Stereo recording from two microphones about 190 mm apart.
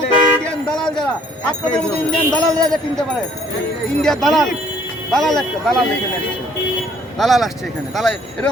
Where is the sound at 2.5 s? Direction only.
5° left (ahead or behind).